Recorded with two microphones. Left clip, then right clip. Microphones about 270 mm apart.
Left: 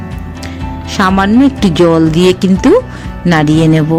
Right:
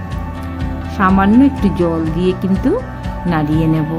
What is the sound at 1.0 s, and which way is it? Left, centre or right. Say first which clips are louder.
Speech: left 3 dB; left.